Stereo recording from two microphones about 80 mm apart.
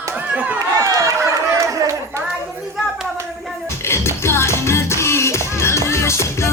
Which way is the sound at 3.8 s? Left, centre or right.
Left.